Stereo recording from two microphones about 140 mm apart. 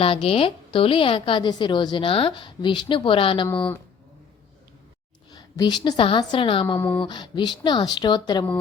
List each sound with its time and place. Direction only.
0.0 s a woman's voice: 45° left (ahead or behind)
3.5 s speech: 10° left (ahead or behind)
5.3 s a woman's voice: 30° left (ahead or behind)
6.7 s speech: 15° left (ahead or behind)
7.0 s a woman's voice: 35° left (ahead or behind)